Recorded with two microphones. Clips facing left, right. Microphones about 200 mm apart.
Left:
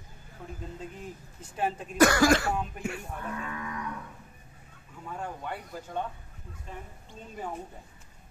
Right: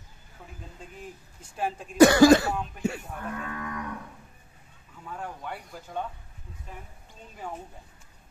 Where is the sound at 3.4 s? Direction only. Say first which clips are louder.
Right 2 dB; 55° right (ahead or behind).